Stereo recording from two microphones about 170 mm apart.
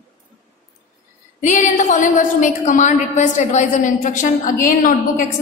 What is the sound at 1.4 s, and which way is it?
A woman's voice, 45° left (ahead or behind).